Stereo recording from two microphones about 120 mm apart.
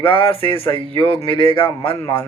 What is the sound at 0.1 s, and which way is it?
Speech, 50° left (ahead or behind).